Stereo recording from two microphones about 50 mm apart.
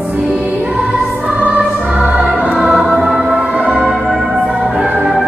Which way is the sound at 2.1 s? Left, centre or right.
Right.